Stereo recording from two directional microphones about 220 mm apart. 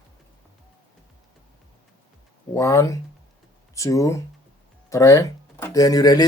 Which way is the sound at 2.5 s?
15° left (ahead or behind).